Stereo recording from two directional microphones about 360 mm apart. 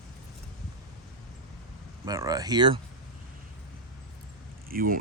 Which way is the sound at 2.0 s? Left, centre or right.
Centre.